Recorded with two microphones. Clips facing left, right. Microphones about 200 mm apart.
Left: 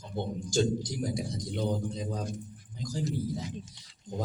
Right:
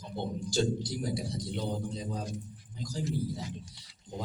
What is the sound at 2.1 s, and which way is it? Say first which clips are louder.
Speech: left 2 dB; 50° left (ahead or behind).